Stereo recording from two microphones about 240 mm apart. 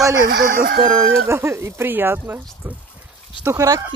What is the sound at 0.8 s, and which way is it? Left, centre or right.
Speech, centre.